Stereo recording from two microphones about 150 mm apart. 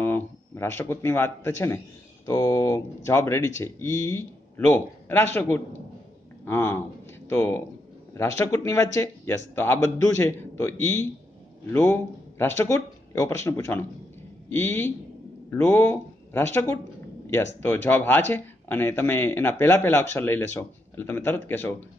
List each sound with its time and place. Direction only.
0.0 s speech: 15° left (ahead or behind)